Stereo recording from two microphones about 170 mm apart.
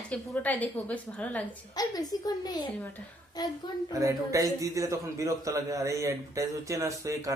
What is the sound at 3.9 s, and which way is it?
A man's voice, 20° right (ahead or behind).